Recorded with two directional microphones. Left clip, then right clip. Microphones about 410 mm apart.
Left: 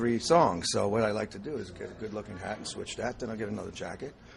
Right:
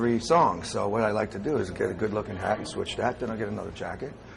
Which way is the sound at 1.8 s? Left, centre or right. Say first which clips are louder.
Right 13 dB; right.